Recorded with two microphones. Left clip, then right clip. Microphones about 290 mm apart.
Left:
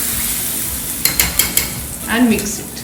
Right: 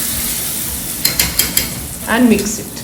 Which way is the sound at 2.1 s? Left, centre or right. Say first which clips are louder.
Right 3 dB; centre.